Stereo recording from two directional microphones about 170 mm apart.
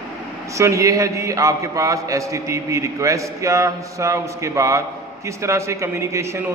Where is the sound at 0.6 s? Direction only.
20° right (ahead or behind).